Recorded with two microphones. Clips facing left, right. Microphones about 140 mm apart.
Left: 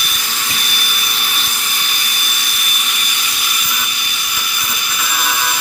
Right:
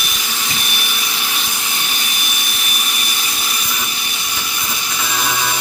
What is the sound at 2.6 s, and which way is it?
Tools, 35° right (ahead or behind).